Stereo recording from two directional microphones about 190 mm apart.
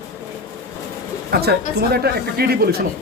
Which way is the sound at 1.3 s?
55° right (ahead or behind).